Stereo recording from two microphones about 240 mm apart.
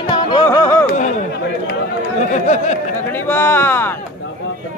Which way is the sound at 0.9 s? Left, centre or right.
Left.